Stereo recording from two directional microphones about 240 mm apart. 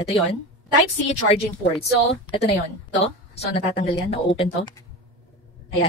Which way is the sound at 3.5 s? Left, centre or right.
Left.